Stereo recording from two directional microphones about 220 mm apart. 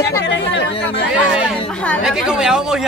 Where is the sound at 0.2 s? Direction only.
50° left (ahead or behind).